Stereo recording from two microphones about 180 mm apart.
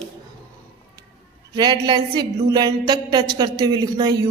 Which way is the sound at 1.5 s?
25° right (ahead or behind).